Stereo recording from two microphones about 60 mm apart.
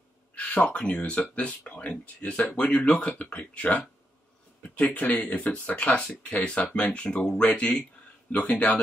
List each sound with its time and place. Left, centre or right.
0.3 s speech: left